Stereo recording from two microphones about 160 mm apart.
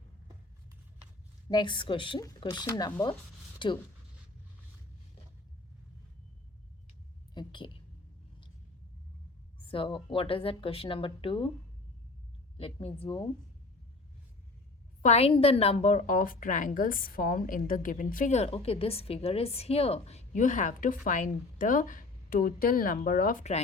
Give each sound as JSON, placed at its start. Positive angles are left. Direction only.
{"t": 1.5, "sound": "speech", "side_deg": 30}
{"t": 7.3, "sound": "a sound", "side_deg": 30}
{"t": 9.6, "sound": "speech", "side_deg": 35}
{"t": 12.5, "sound": "speech", "side_deg": 35}
{"t": 15.0, "sound": "a woman's voice", "side_deg": 40}